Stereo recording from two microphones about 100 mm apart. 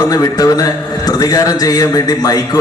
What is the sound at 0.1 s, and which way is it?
A man's voice, 40° left (ahead or behind).